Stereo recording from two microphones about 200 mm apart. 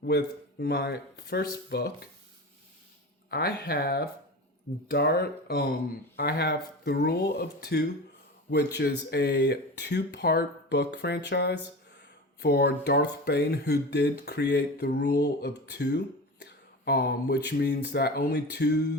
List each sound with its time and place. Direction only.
0.0 s speech: 50° left (ahead or behind)
3.2 s speech: 50° left (ahead or behind)